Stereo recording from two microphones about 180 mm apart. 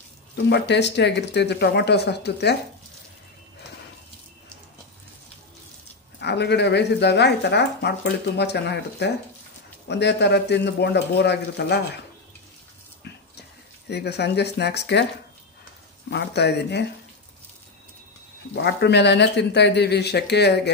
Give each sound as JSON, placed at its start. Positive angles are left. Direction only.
{"t": 0.5, "sound": "speech", "side_deg": 70}
{"t": 6.1, "sound": "speech", "side_deg": 70}
{"t": 13.8, "sound": "speech", "side_deg": 65}
{"t": 16.1, "sound": "speech", "side_deg": 70}
{"t": 18.5, "sound": "speech", "side_deg": 65}